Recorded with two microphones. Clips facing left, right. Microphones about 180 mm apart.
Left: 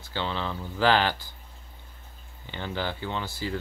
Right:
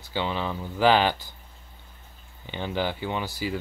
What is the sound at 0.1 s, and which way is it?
Speech, 15° right (ahead or behind).